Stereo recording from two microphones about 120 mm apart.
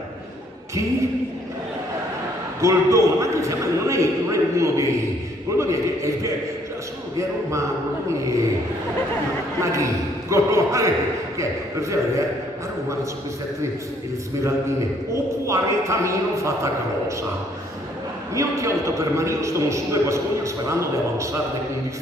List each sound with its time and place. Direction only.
2.6 s a man's voice: 25° right (ahead or behind)
9.6 s a man's voice: 25° right (ahead or behind)
15.4 s a man's voice: 25° right (ahead or behind)
18.3 s a man's voice: 25° right (ahead or behind)